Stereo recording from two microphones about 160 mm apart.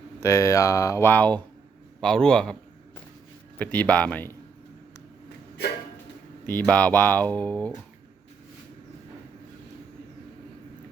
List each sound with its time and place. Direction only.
0.2 s a man's voice: 20° left (ahead or behind)
3.6 s speech: 10° left (ahead or behind)
6.4 s speech: 10° left (ahead or behind)